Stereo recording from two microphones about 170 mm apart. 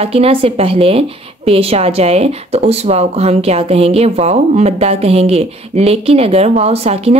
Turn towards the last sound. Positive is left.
turn(degrees=-35)  # may be behind; listen again after turning